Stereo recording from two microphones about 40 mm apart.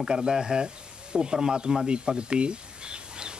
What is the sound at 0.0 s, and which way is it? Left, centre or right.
Speech, right.